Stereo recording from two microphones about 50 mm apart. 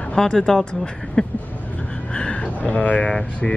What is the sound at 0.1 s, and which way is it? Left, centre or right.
Speech, centre.